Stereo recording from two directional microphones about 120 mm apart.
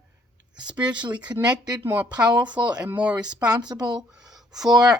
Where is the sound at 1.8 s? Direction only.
15° right (ahead or behind).